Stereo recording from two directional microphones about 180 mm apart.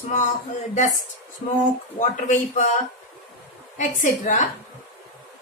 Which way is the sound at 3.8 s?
45° left (ahead or behind).